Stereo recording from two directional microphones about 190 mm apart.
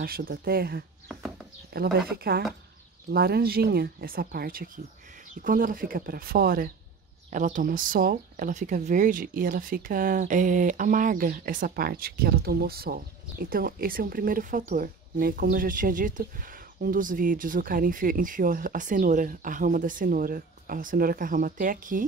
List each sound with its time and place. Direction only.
0.0 s speech: 50° right (ahead or behind)